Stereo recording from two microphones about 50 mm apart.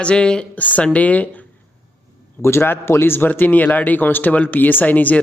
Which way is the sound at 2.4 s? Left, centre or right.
Left.